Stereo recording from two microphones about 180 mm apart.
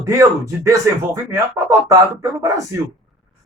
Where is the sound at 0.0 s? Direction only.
15° right (ahead or behind).